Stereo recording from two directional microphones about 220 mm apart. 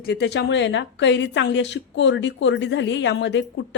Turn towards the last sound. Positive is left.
turn(degrees=55)  # may be behind; listen again after turning